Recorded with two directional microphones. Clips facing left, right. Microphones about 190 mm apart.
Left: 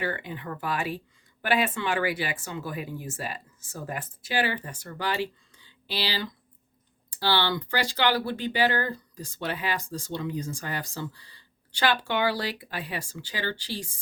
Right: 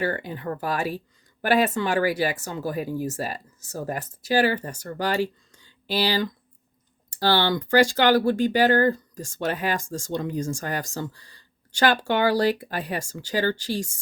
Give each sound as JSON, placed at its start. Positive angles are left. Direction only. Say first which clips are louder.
{"t": 0.0, "sound": "speech", "louder": "right 5 dB", "side_deg": -40}